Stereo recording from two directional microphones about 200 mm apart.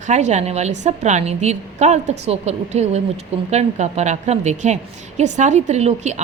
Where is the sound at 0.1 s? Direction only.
35° right (ahead or behind).